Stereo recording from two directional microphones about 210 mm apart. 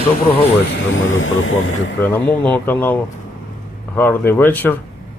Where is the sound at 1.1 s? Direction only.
75° left (ahead or behind).